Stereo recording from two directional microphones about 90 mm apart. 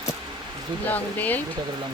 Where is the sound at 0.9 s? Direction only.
20° left (ahead or behind).